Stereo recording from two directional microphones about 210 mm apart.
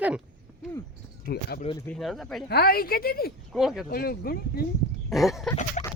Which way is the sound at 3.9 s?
45° left (ahead or behind).